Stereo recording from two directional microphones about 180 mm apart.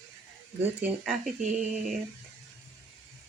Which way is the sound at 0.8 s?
Centre (ahead or behind).